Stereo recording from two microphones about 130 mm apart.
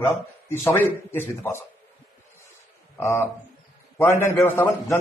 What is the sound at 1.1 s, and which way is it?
Speech, 20° left (ahead or behind).